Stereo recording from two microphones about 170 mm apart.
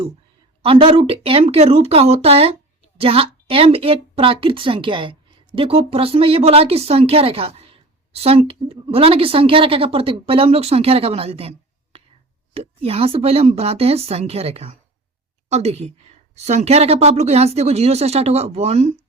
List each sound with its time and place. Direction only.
0.6 s a woman's voice: 35° right (ahead or behind)
11.9 s a sound: 35° right (ahead or behind)
12.5 s speech: 35° right (ahead or behind)